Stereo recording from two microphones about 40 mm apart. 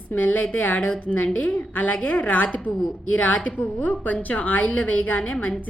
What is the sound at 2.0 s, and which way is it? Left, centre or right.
Speech, left.